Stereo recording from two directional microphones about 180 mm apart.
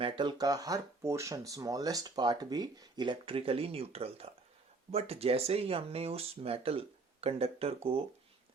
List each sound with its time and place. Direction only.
0.0 s speech: 25° right (ahead or behind)